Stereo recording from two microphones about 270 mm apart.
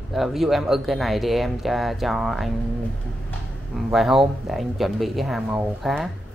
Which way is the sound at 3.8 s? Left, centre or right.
Centre.